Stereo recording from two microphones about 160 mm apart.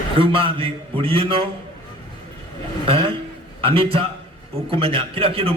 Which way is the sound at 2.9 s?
35° right (ahead or behind).